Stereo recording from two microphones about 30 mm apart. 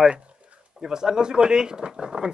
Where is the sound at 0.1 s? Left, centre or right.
Right.